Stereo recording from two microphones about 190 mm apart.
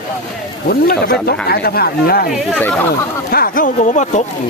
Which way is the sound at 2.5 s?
10° left (ahead or behind).